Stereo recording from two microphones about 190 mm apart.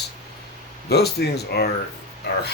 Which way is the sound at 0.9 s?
60° left (ahead or behind).